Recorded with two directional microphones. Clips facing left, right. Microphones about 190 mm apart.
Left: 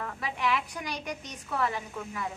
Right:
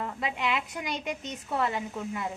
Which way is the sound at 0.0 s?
20° right (ahead or behind).